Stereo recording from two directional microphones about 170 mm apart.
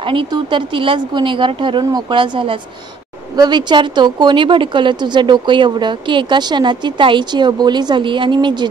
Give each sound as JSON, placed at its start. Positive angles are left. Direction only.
{"t": 0.0, "sound": "speech", "side_deg": -30}